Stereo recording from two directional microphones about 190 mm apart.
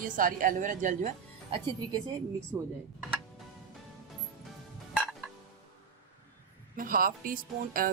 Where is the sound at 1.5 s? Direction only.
25° right (ahead or behind).